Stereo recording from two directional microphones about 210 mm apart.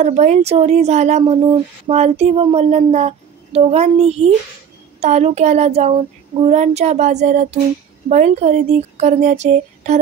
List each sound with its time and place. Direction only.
0.0 s speech: 30° right (ahead or behind)